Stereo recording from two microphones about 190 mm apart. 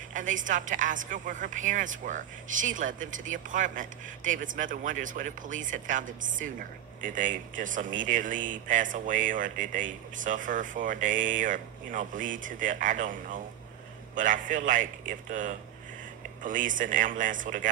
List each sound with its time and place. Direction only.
0.1 s speech: 45° right (ahead or behind)